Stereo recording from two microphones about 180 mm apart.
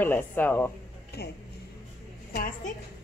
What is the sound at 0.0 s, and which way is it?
Speech, 10° left (ahead or behind).